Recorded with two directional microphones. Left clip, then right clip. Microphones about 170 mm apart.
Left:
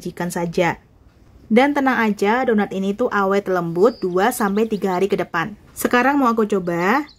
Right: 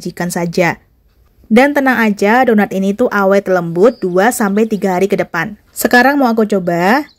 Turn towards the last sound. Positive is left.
turn(degrees=-35)  # may be behind; listen again after turning